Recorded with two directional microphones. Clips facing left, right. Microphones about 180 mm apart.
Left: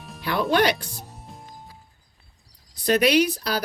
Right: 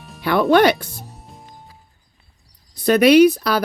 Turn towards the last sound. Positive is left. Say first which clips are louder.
# right 9 dB
turn(degrees=-55)  # may be behind; listen again after turning